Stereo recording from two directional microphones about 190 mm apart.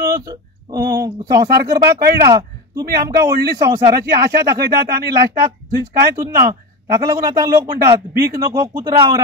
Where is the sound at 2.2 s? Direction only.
20° right (ahead or behind).